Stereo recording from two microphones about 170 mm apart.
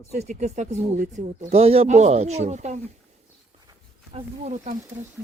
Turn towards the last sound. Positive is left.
turn(degrees=-45)  # may be behind; listen again after turning